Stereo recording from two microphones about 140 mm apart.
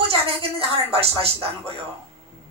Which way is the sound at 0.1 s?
45° right (ahead or behind).